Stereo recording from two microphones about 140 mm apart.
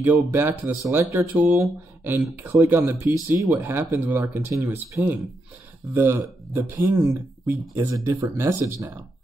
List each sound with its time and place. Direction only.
0.0 s speech: 15° right (ahead or behind)